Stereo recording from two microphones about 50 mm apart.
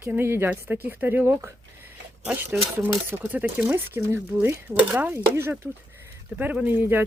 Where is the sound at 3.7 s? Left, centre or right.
Right.